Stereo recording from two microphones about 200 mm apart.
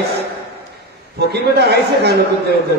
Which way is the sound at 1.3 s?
55° right (ahead or behind).